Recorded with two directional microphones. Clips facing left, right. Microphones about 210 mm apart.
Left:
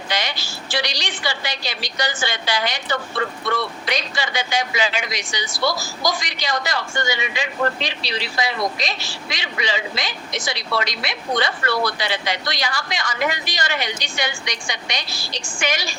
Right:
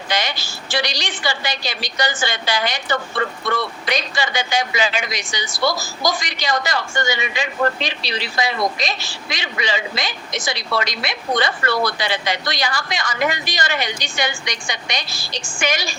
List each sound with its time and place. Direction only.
0.1 s speech: 45° right (ahead or behind)